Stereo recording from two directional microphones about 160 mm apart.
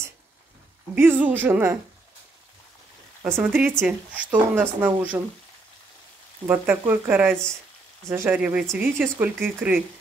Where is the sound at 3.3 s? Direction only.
10° right (ahead or behind).